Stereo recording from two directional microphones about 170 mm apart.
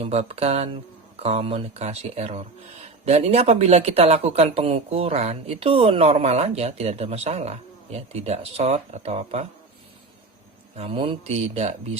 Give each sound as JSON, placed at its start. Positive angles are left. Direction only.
{"t": 0.0, "sound": "speech", "side_deg": -35}
{"t": 10.8, "sound": "speech", "side_deg": -30}